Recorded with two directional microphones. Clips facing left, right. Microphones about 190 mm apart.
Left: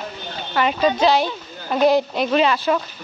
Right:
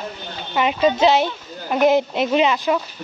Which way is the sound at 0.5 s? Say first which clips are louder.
Right 1 dB; 15° right (ahead or behind).